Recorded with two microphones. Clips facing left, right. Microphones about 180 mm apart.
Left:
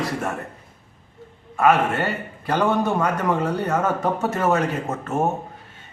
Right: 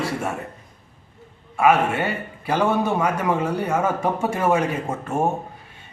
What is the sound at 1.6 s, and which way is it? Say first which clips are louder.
A man's voice: even; 10° right (ahead or behind).